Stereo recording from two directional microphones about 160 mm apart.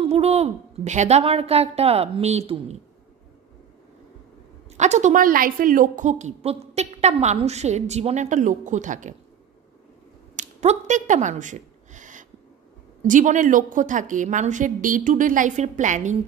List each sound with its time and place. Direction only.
0.1 s a woman's voice: 40° right (ahead or behind)
4.7 s a woman's voice: 45° right (ahead or behind)
10.3 s a sound: 45° right (ahead or behind)
13.0 s a woman's voice: 55° right (ahead or behind)